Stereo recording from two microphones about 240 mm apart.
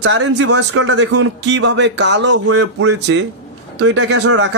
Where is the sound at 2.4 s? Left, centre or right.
Right.